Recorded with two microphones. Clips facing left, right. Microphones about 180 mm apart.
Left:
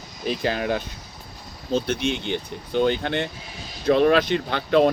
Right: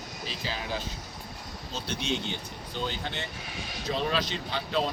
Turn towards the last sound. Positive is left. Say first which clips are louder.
# left 11 dB
turn(degrees=60)  # may be behind; listen again after turning